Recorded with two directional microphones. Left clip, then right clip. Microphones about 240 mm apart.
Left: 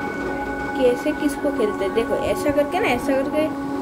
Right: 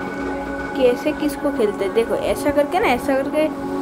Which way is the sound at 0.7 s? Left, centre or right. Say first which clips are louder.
Right 2 dB; centre.